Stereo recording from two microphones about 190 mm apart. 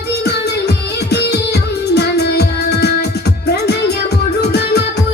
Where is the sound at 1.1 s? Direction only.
60° left (ahead or behind).